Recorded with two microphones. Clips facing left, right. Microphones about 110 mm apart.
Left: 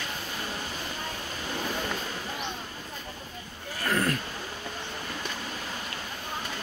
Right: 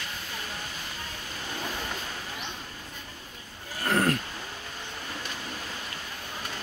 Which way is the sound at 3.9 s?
50° right (ahead or behind).